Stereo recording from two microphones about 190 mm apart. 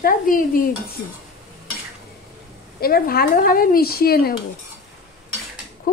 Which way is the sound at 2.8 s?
50° left (ahead or behind).